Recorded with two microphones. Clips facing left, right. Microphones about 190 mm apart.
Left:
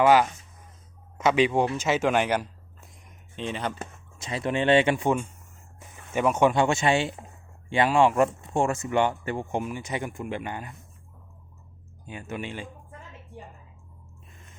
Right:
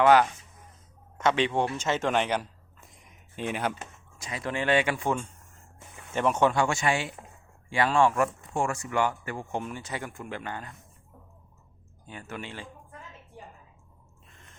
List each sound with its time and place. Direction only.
0.0 s speech: 5° left (ahead or behind); by 3.8 s 10° right (ahead or behind)
4.2 s speech: 25° left (ahead or behind); by 6.5 s 10° left (ahead or behind)
6.5 s speech: 20° left (ahead or behind)
9.6 s speech: 10° left (ahead or behind)
12.0 s speech: 15° left (ahead or behind)